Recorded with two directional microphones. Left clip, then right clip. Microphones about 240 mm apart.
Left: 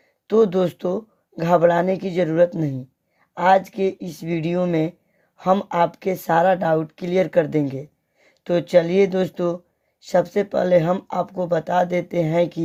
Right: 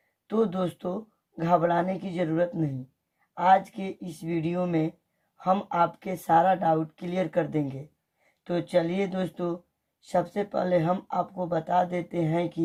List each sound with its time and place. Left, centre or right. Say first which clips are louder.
0.3 s speech: left 10 dB; left